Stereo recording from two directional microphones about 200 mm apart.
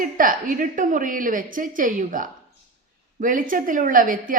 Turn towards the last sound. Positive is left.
turn(degrees=-45)  # may be behind; listen again after turning